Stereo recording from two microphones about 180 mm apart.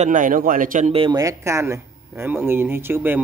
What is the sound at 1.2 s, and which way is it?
Speech, 15° right (ahead or behind).